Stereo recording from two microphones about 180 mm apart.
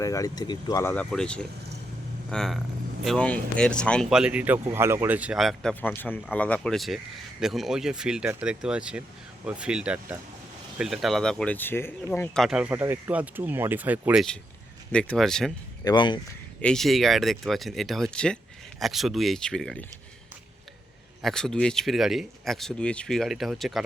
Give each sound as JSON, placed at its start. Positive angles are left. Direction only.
{"t": 0.0, "sound": "speech", "side_deg": 20}
{"t": 15.8, "sound": "speech", "side_deg": 25}
{"t": 16.6, "sound": "speech", "side_deg": 5}
{"t": 21.2, "sound": "speech", "side_deg": 0}